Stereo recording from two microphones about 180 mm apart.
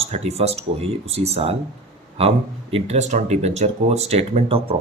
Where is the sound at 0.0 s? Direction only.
35° right (ahead or behind).